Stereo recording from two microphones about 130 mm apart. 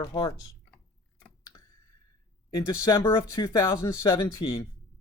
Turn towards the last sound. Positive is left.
turn(degrees=25)  # may be behind; listen again after turning